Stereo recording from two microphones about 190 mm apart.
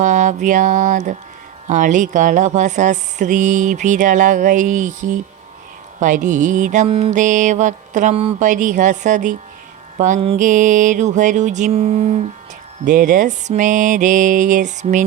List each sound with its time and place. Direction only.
0.0 s music: 40° right (ahead or behind)
1.6 s speech: 40° right (ahead or behind)
12.8 s music: 45° right (ahead or behind)